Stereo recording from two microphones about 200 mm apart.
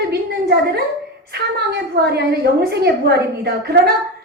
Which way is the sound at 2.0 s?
50° right (ahead or behind).